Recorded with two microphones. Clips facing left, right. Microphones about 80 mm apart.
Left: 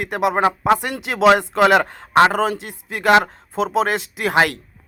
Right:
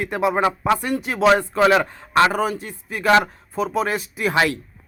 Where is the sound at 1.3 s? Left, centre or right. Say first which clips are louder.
Left 2 dB; left.